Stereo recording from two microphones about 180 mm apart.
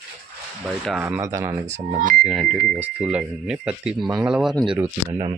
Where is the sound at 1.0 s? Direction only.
15° right (ahead or behind).